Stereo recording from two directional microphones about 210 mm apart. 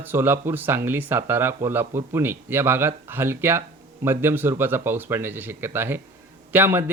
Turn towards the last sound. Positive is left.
turn(degrees=-10)  # may be behind; listen again after turning